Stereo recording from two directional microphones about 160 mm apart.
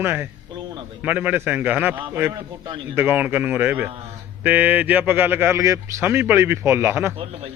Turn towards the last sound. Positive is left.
turn(degrees=-15)  # may be behind; listen again after turning